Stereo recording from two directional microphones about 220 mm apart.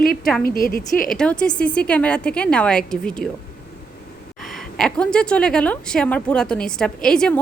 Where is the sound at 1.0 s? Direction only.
5° left (ahead or behind).